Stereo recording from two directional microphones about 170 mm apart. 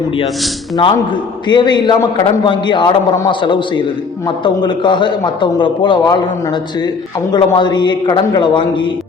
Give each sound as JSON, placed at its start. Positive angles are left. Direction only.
{"t": 0.8, "sound": "a man's voice", "side_deg": 30}